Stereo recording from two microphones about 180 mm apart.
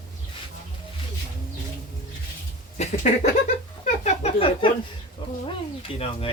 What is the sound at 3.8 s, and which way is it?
Speech, 40° left (ahead or behind).